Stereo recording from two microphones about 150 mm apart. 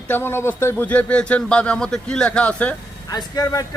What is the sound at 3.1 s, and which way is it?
Speech, 25° left (ahead or behind).